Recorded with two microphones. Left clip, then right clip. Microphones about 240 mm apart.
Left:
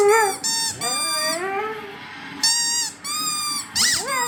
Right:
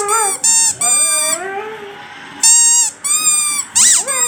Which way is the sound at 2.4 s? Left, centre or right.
Right.